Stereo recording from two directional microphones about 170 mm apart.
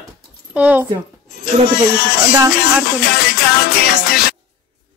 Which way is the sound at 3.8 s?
60° left (ahead or behind).